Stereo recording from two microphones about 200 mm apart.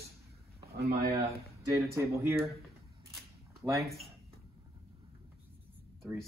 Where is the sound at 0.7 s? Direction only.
50° right (ahead or behind).